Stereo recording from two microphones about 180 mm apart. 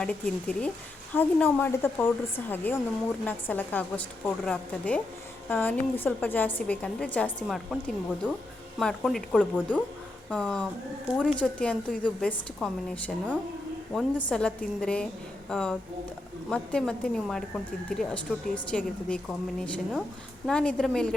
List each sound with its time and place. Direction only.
0.0 s speech: 5° left (ahead or behind)